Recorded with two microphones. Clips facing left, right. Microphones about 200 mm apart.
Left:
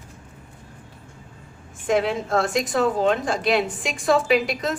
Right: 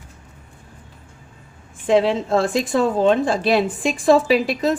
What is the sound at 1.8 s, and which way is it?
A woman's voice, 30° right (ahead or behind).